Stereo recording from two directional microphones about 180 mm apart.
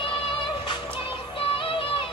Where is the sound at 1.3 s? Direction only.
30° left (ahead or behind).